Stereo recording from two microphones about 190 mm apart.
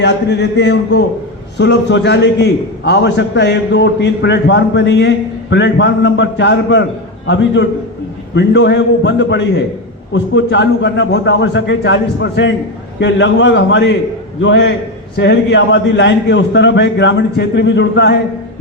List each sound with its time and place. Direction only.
0.0 s a man's voice: 65° left (ahead or behind)